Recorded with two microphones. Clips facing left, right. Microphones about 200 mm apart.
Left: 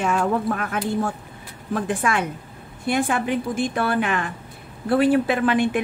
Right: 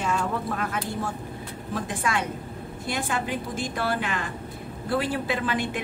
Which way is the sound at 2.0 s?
60° left (ahead or behind).